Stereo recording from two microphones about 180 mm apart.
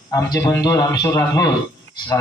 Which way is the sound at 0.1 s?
20° left (ahead or behind).